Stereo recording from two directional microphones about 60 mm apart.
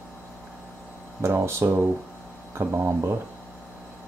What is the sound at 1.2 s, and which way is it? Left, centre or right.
Speech, right.